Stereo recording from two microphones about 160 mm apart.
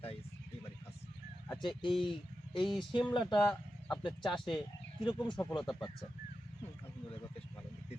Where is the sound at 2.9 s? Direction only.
30° left (ahead or behind).